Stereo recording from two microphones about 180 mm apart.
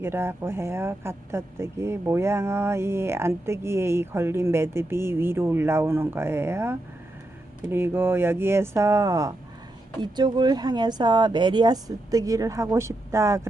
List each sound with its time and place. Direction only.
0.0 s speech: 15° right (ahead or behind)